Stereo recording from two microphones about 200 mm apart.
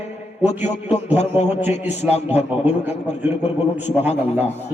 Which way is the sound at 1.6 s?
10° right (ahead or behind).